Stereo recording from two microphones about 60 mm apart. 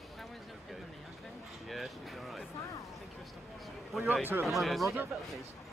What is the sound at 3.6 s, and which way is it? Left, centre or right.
Speech, centre.